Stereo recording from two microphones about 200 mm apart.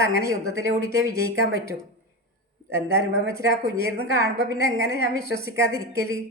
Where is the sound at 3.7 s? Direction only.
15° right (ahead or behind).